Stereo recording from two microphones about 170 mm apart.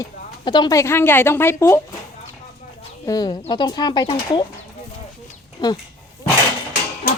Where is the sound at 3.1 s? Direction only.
20° left (ahead or behind).